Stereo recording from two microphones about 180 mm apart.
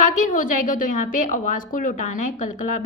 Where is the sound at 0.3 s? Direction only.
50° left (ahead or behind).